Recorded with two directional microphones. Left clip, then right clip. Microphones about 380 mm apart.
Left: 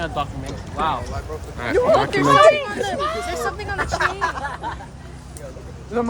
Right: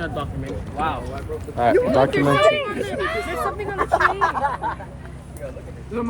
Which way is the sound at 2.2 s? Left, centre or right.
Centre.